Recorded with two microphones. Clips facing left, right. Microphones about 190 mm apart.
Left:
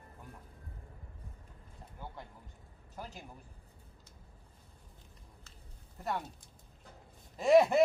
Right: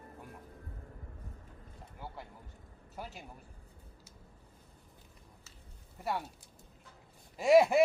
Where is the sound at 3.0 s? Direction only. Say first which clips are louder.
Right 1 dB; 5° right (ahead or behind).